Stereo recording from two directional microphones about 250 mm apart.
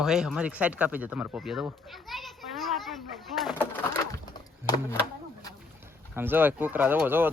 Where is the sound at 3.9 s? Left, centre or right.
Centre.